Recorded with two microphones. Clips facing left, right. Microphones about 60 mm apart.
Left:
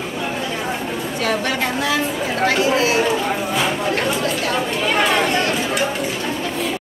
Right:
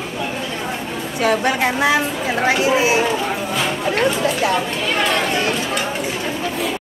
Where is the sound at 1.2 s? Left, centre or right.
Centre.